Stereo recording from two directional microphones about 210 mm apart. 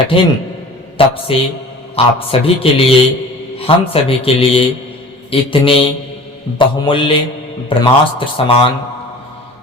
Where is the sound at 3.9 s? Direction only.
25° left (ahead or behind).